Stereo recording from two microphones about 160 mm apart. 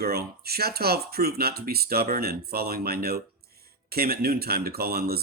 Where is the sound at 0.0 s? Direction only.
75° right (ahead or behind).